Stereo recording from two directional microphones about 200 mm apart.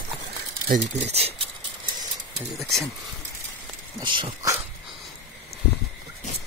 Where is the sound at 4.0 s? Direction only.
25° right (ahead or behind).